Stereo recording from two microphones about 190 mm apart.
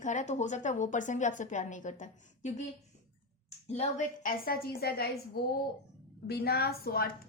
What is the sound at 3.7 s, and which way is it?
A woman's voice, 35° left (ahead or behind).